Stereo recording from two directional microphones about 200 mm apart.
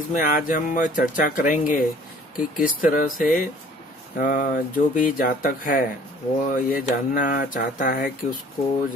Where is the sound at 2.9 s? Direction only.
45° left (ahead or behind).